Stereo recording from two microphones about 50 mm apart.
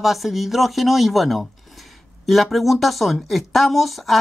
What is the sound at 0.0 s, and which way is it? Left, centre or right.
Speech, centre.